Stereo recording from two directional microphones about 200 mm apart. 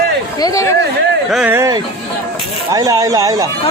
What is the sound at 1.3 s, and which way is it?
Speech, 5° right (ahead or behind).